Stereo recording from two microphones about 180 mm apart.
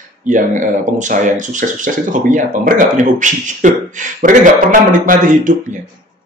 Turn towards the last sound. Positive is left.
turn(degrees=-45)  # may be behind; listen again after turning